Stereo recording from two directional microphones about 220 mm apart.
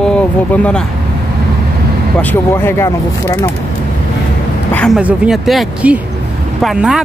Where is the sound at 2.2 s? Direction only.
10° left (ahead or behind).